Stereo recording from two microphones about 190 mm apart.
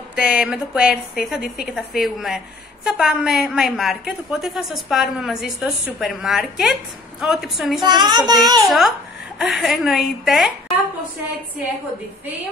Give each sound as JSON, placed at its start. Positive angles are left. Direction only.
{"t": 0.1, "sound": "a woman's voice", "side_deg": -5}
{"t": 7.8, "sound": "a child's voice", "side_deg": -20}
{"t": 8.6, "sound": "a woman's voice", "side_deg": 0}